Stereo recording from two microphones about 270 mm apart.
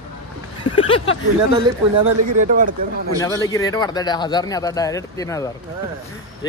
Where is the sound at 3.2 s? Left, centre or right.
Centre.